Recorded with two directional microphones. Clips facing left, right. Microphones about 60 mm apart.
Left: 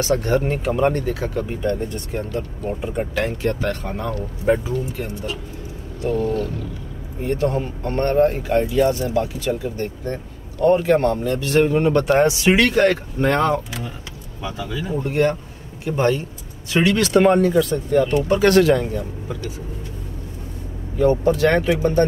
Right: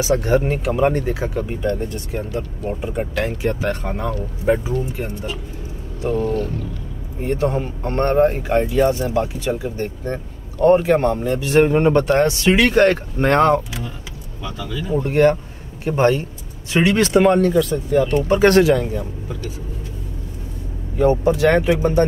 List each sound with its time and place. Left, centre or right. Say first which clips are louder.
0.0 s speech: right 2 dB; centre
3.4 s speech: right 1 dB; centre
4.6 s speech: right 1 dB; right
11.6 s speech: right 3 dB; right
12.2 s speech: even; centre
12.7 s speech: right 2 dB; right
14.4 s speech: left 1 dB; centre
15.0 s speech: right 5 dB; right
17.2 s speech: left 1 dB; centre
18.3 s speech: right 2 dB; right
21.0 s speech: right 1 dB; centre